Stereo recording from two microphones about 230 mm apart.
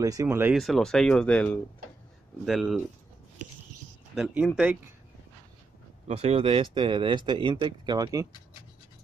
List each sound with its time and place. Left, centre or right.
0.0 s speech: centre
0.6 s speech: centre
4.1 s speech: centre
6.0 s speech: right